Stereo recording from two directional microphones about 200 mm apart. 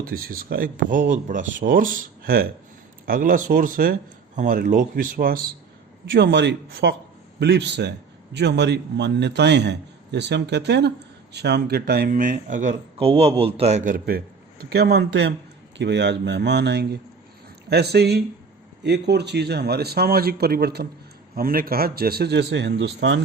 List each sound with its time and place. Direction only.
0.0 s speech: 45° right (ahead or behind)
6.1 s a man's voice: 60° right (ahead or behind)